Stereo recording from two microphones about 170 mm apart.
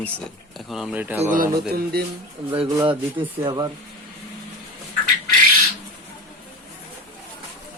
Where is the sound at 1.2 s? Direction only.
55° right (ahead or behind).